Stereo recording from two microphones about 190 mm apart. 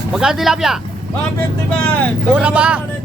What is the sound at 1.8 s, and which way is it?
Speech, 10° left (ahead or behind).